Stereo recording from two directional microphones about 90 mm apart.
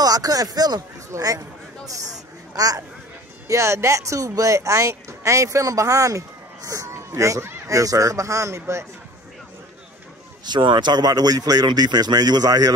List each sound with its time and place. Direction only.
0.0 s speech: 45° right (ahead or behind)
2.5 s speech: 45° right (ahead or behind)
10.4 s speech: 60° right (ahead or behind)